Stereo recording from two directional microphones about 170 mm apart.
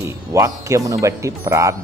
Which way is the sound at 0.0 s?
15° right (ahead or behind).